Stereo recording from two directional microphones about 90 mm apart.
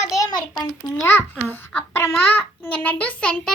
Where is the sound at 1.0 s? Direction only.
25° left (ahead or behind).